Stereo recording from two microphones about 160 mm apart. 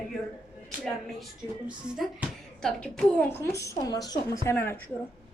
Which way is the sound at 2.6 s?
5° left (ahead or behind).